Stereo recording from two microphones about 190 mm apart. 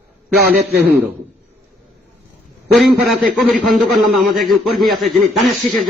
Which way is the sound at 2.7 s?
Centre (ahead or behind).